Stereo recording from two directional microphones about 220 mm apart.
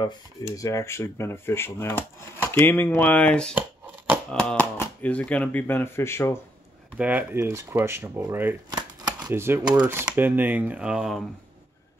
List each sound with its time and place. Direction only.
0.6 s speech: 15° left (ahead or behind)
7.0 s speech: 5° right (ahead or behind)
8.7 s shuffling cards: 20° right (ahead or behind)
9.8 s speech: 5° right (ahead or behind)